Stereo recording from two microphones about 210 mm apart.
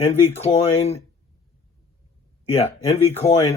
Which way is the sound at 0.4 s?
30° left (ahead or behind).